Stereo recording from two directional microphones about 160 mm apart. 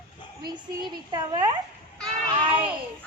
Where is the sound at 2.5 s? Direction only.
10° right (ahead or behind).